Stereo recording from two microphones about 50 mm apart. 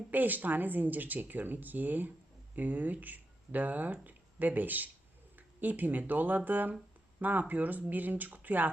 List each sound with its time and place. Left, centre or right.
0.1 s speech: right